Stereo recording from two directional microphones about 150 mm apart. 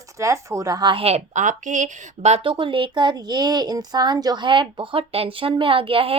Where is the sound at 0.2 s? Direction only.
20° right (ahead or behind).